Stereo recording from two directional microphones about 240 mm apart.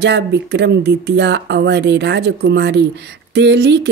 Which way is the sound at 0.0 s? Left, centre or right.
Right.